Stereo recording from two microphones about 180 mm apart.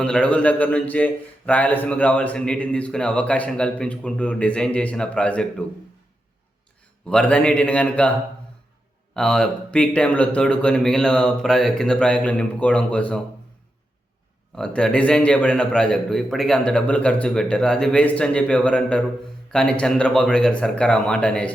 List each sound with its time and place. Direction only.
0.0 s a man's voice: 5° left (ahead or behind)
7.1 s a man's voice: 5° left (ahead or behind)
9.1 s a man's voice: 5° left (ahead or behind)
14.5 s a man's voice: 5° left (ahead or behind)